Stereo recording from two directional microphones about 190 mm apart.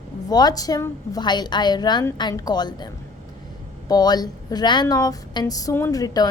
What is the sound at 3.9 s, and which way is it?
A woman's voice, 20° left (ahead or behind).